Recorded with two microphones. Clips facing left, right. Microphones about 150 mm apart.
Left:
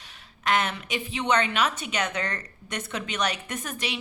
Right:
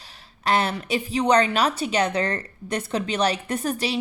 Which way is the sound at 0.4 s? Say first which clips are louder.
Right 3 dB; 35° right (ahead or behind).